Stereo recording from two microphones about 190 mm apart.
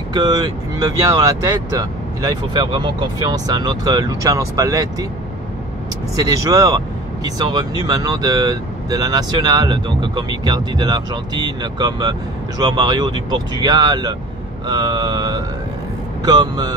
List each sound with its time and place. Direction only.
0.1 s speech: 20° right (ahead or behind)
6.1 s speech: 20° right (ahead or behind)